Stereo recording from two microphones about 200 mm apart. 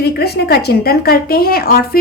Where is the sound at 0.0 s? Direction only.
55° left (ahead or behind).